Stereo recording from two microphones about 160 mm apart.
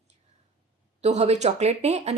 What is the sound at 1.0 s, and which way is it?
Speech, 45° right (ahead or behind).